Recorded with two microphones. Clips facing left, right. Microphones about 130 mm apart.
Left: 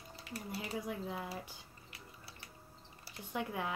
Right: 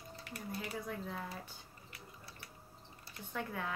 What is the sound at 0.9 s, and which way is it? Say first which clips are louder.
Speech: left 2 dB; 15° left (ahead or behind).